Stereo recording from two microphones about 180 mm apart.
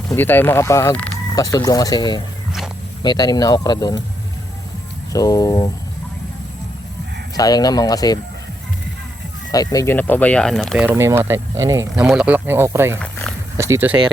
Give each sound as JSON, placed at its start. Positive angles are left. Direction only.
{"t": 0.1, "sound": "speech", "side_deg": 10}
{"t": 5.1, "sound": "speech", "side_deg": 20}
{"t": 7.3, "sound": "speech", "side_deg": 20}
{"t": 9.5, "sound": "speech", "side_deg": 20}
{"t": 10.8, "sound": "speech", "side_deg": -15}
{"t": 12.0, "sound": "speech", "side_deg": -5}